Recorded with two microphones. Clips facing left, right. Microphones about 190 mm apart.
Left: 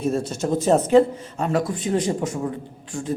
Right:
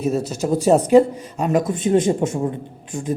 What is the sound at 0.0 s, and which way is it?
A man's voice, 5° right (ahead or behind).